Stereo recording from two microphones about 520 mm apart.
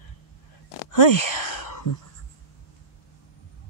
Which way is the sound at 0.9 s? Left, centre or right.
Left.